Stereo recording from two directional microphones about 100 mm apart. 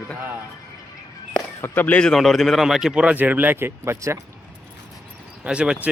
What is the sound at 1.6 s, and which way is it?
Speech, 20° left (ahead or behind).